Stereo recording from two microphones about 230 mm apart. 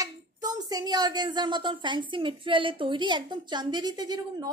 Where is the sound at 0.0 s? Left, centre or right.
Centre.